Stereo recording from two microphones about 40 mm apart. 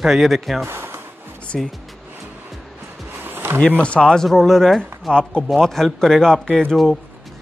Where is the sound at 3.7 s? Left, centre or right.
Left.